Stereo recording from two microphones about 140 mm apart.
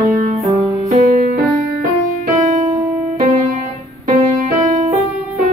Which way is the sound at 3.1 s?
60° right (ahead or behind).